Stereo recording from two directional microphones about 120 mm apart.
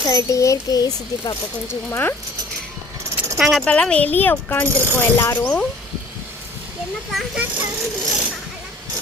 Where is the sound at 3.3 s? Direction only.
Centre (ahead or behind).